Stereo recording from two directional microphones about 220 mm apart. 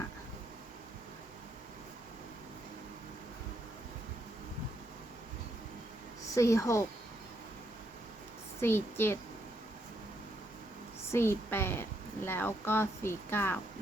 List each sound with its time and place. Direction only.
6.3 s a woman's voice: 15° left (ahead or behind)
8.6 s a woman's voice: 10° left (ahead or behind)
11.1 s a woman's voice: 10° left (ahead or behind)